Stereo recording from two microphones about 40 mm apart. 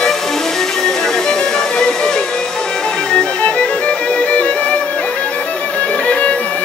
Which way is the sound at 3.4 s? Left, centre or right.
Left.